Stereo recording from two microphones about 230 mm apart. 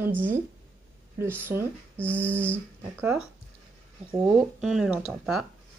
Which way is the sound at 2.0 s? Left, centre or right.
Centre.